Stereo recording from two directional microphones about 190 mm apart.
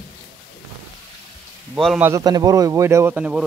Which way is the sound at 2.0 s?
15° right (ahead or behind).